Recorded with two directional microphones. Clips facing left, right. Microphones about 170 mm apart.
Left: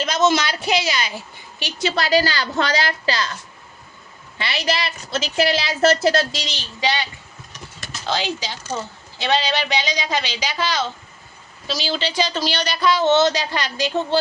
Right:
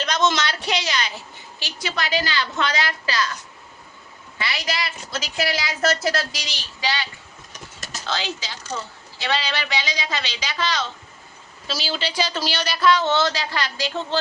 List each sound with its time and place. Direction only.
0.0 s a woman's voice: 5° left (ahead or behind)
1.9 s a woman's voice: 35° left (ahead or behind)
4.4 s a woman's voice: 25° left (ahead or behind); by 10.8 s 10° left (ahead or behind)
11.7 s speech: 5° right (ahead or behind)
13.0 s a woman's voice: 20° left (ahead or behind)